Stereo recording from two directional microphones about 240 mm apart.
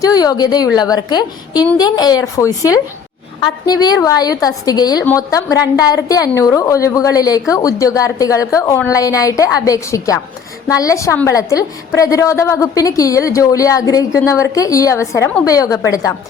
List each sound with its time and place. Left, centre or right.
0.0 s a woman's voice: centre